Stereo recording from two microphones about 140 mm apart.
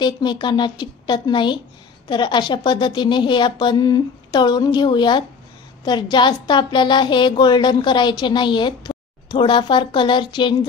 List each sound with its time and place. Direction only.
0.0 s a woman's voice: 30° left (ahead or behind)